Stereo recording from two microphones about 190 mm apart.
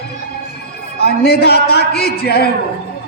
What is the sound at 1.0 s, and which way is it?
A man's voice, 55° left (ahead or behind).